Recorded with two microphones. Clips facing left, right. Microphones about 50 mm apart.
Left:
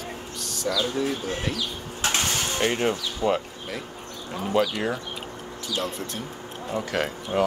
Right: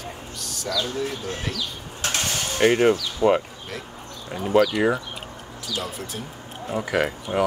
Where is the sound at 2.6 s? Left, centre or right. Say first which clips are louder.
Right 8 dB; centre.